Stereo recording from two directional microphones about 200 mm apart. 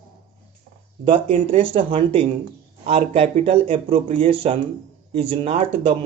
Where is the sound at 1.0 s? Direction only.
25° right (ahead or behind).